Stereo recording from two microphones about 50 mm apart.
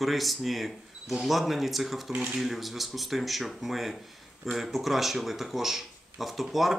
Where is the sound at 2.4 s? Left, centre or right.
Centre.